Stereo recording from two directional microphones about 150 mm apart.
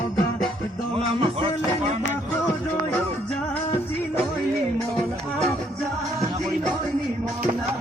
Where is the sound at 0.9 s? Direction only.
40° right (ahead or behind).